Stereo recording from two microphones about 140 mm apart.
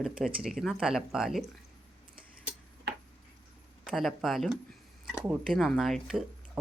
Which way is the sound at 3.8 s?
Centre (ahead or behind).